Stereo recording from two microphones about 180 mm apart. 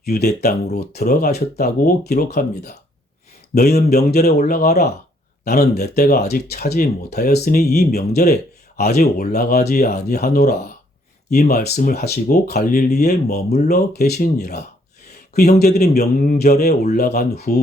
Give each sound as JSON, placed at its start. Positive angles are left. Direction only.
{"t": 0.0, "sound": "speech", "side_deg": 60}
{"t": 17.2, "sound": "speech", "side_deg": 60}